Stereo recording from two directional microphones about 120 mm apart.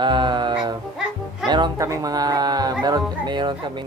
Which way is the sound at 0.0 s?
40° right (ahead or behind).